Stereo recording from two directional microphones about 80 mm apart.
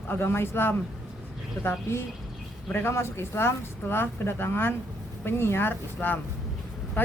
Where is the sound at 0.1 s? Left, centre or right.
Left.